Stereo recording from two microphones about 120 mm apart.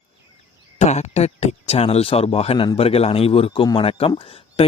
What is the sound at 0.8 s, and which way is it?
Speech, 70° left (ahead or behind).